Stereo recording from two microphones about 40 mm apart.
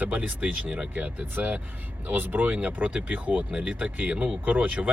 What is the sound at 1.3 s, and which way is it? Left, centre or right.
Speech, right.